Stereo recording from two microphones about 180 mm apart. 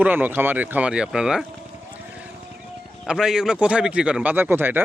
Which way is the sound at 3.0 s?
5° right (ahead or behind).